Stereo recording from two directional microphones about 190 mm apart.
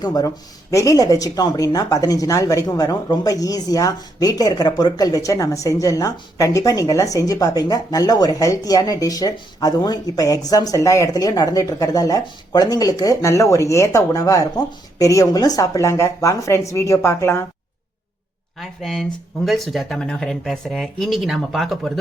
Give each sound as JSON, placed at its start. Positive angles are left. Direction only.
{"t": 0.0, "sound": "speech", "side_deg": 20}
{"t": 18.8, "sound": "speech", "side_deg": 0}